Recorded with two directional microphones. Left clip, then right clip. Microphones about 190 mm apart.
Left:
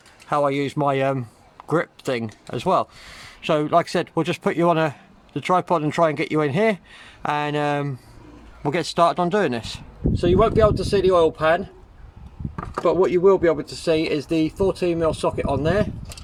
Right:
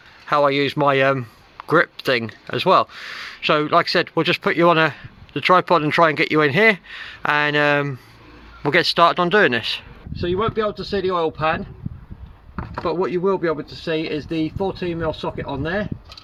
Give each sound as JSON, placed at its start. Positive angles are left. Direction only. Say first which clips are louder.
{"t": 0.3, "sound": "a man's voice", "louder": "right 4 dB", "side_deg": 10}
{"t": 10.2, "sound": "speech", "louder": "left 4 dB", "side_deg": -15}
{"t": 12.8, "sound": "speech", "louder": "left 4 dB", "side_deg": -20}